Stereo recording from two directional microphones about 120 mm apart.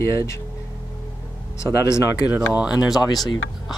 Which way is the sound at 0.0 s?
25° left (ahead or behind).